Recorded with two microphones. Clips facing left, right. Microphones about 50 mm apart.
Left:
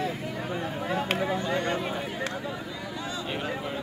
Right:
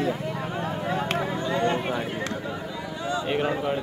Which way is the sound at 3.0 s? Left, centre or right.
Centre.